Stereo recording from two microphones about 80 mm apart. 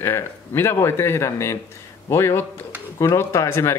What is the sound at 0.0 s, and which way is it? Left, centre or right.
Speech, left.